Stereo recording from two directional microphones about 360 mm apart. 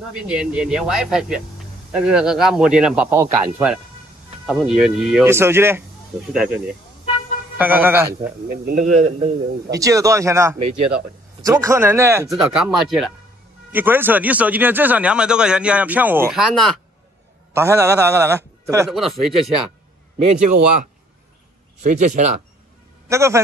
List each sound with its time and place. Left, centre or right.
0.3 s speech: centre
8.5 s a man's voice: right; by 19.5 s centre
21.8 s speech: centre
23.0 s a man's voice: centre